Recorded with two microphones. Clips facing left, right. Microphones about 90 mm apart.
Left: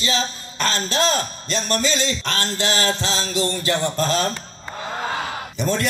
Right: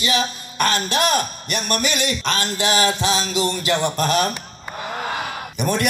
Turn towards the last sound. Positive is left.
turn(degrees=-15)  # may be behind; listen again after turning